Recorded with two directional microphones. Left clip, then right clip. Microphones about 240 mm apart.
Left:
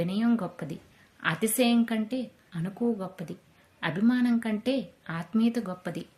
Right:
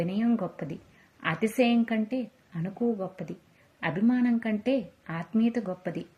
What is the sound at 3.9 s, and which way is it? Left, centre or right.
Speech, centre.